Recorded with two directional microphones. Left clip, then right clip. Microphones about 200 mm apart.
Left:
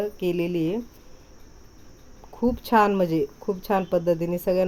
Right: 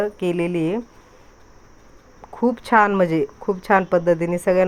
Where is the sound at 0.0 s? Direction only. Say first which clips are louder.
Right 4 dB; centre (ahead or behind).